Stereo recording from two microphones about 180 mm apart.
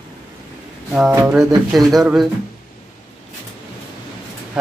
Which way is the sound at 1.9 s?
Centre (ahead or behind).